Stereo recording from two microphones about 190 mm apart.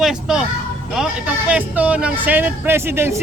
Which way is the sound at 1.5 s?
10° right (ahead or behind).